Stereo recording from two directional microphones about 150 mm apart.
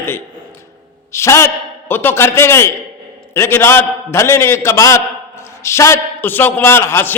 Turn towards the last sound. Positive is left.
turn(degrees=15)  # may be behind; listen again after turning